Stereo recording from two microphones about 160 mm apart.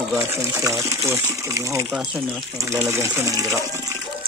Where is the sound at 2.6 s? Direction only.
20° right (ahead or behind).